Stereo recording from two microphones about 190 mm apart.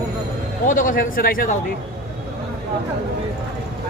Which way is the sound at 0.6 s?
45° left (ahead or behind).